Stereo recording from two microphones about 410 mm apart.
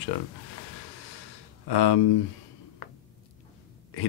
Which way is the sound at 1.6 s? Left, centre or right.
Left.